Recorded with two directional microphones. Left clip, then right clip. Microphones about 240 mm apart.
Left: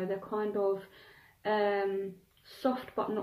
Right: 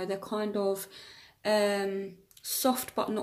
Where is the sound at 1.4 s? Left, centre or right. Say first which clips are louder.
Right 3 dB; right.